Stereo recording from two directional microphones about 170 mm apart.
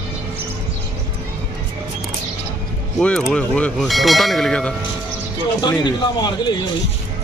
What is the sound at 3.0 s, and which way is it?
Speech, centre (ahead or behind).